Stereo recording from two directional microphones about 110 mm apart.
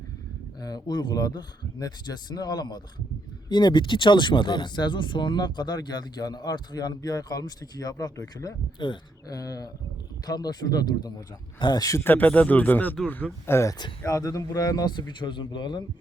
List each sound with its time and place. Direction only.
0.6 s speech: 40° left (ahead or behind)
8.8 s speech: 45° left (ahead or behind)
9.4 s speech: 35° left (ahead or behind)
11.9 s speech: 20° left (ahead or behind); by 15.8 s 45° left (ahead or behind)